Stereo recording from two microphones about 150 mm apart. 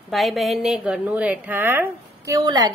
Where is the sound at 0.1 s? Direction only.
Centre (ahead or behind).